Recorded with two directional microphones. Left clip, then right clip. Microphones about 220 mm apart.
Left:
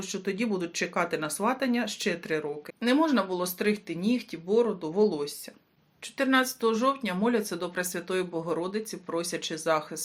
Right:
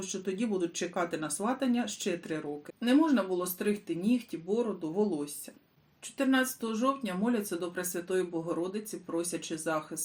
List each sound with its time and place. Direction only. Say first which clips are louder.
0.0 s speech: left 3 dB; 25° left (ahead or behind)